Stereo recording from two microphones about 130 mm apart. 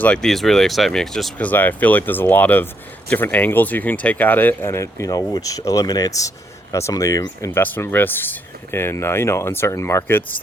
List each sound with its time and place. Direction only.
0.0 s speech: 5° left (ahead or behind); by 7.6 s 25° left (ahead or behind)
7.6 s speech: 15° left (ahead or behind)